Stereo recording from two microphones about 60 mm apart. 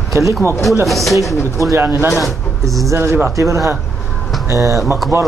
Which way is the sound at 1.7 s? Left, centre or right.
Right.